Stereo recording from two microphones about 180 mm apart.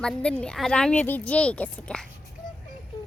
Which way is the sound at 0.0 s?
5° left (ahead or behind).